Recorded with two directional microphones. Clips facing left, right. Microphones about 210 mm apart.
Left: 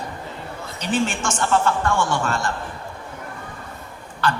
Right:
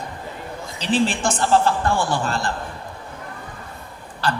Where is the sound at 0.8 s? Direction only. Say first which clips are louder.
Right 3 dB; 35° right (ahead or behind).